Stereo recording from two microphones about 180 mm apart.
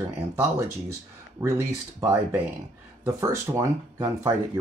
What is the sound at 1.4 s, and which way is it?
Speech, 15° right (ahead or behind).